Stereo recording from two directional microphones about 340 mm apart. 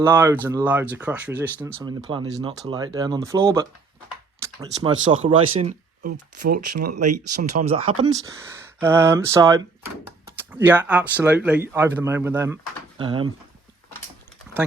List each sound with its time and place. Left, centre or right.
0.0 s speech: centre
1.8 s speech: centre
7.5 s speech: centre